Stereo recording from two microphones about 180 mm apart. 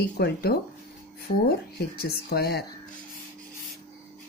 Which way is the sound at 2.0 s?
60° left (ahead or behind).